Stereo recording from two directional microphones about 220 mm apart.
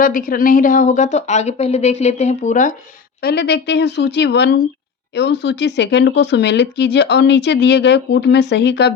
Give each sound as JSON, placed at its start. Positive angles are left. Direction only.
{"t": 0.0, "sound": "a woman's voice", "side_deg": 40}
{"t": 3.2, "sound": "speech", "side_deg": 45}